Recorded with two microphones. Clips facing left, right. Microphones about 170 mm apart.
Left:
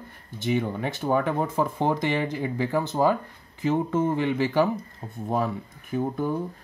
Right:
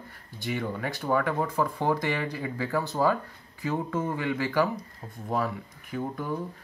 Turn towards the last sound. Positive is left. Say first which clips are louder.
# left 6 dB
turn(degrees=25)  # may be behind; listen again after turning